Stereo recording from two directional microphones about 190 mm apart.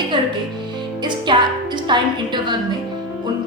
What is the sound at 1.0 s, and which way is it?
Music, 25° right (ahead or behind).